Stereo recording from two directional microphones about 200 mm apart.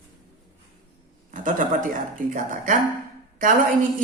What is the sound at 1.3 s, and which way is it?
Speech, 40° right (ahead or behind).